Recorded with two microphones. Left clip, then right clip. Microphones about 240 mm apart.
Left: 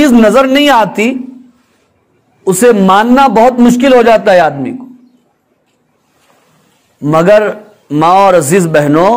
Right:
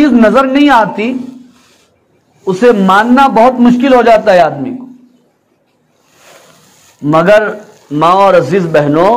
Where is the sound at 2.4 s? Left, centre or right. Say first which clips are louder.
Left 1 dB; left.